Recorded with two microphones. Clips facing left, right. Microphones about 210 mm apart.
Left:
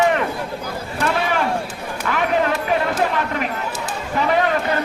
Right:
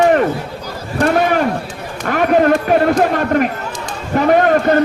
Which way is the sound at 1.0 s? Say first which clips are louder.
Right 7 dB; 50° right (ahead or behind).